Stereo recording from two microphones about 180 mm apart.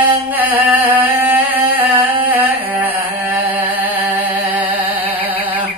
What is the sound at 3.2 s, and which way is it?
Music, 10° right (ahead or behind).